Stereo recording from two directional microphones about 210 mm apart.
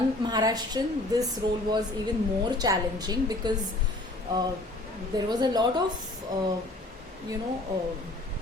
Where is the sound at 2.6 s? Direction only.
20° right (ahead or behind).